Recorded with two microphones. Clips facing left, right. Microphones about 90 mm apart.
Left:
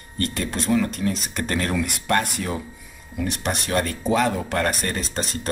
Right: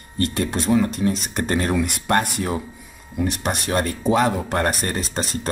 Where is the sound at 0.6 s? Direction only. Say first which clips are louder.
Right 2 dB; 15° right (ahead or behind).